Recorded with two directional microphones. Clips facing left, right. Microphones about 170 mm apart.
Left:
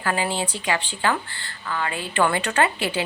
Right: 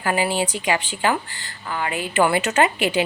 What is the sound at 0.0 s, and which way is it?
Speech, 15° right (ahead or behind).